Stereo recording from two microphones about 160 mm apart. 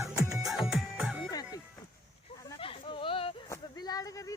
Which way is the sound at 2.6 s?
35° left (ahead or behind).